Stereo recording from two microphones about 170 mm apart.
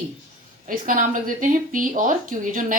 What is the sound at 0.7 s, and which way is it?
Speech, 50° right (ahead or behind).